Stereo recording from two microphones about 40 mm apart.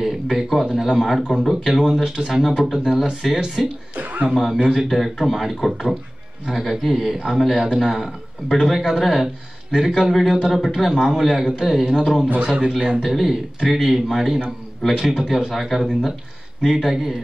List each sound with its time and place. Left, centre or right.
0.0 s a man's voice: centre
3.9 s speech: right
4.3 s a man's voice: centre
4.7 s a man's voice: centre; by 12.7 s right
13.0 s a man's voice: centre